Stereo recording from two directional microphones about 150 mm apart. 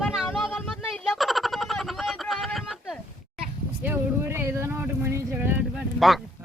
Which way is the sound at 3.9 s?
15° right (ahead or behind).